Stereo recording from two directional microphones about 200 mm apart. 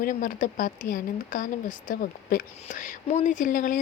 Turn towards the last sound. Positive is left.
turn(degrees=40)  # may be behind; listen again after turning